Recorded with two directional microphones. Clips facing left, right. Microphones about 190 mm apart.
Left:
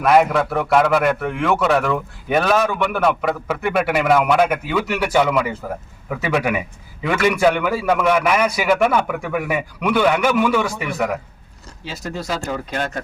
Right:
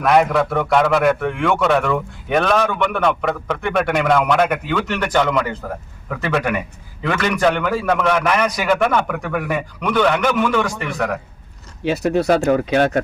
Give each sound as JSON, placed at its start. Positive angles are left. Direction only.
{"t": 0.0, "sound": "a man's voice", "side_deg": 0}
{"t": 11.9, "sound": "speech", "side_deg": -60}